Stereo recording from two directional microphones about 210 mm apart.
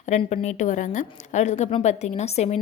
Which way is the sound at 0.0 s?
35° left (ahead or behind).